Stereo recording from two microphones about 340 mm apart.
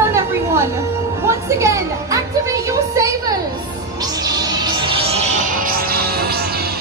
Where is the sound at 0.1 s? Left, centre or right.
Centre; by 6.7 s right.